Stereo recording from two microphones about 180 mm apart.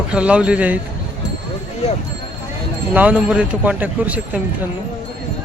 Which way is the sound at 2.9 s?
10° right (ahead or behind).